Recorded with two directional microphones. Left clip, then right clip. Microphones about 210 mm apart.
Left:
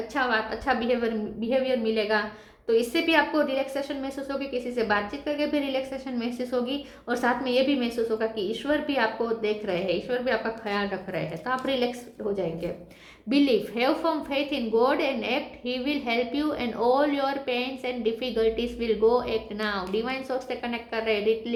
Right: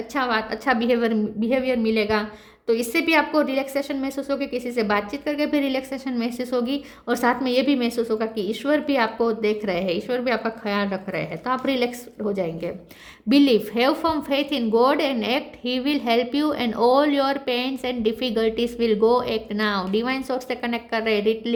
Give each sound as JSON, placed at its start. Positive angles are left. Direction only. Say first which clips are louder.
{"t": 0.1, "sound": "a woman's voice", "louder": "right 3 dB", "side_deg": -50}